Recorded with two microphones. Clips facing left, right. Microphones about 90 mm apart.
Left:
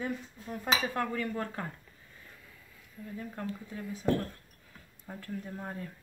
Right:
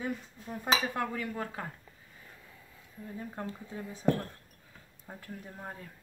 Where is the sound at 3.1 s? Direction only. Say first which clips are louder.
Left 1 dB; 25° right (ahead or behind).